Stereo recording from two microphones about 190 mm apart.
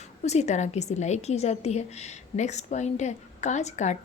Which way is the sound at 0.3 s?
35° left (ahead or behind).